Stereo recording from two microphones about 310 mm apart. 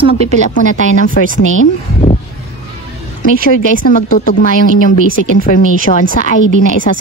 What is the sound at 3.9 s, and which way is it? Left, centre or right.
Speech, left.